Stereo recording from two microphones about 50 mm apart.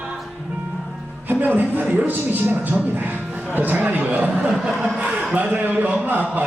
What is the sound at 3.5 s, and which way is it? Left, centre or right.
A man's voice, right.